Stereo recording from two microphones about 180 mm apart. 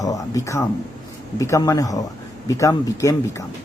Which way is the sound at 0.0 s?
20° left (ahead or behind).